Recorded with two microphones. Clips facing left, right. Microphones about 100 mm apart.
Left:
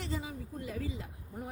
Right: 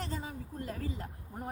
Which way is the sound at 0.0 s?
45° right (ahead or behind).